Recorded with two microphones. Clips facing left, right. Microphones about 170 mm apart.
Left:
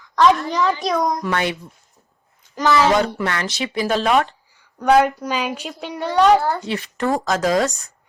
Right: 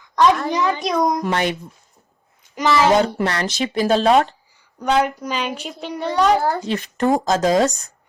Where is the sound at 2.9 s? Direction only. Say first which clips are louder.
Right 2 dB; 30° right (ahead or behind); by 3.8 s 45° right (ahead or behind).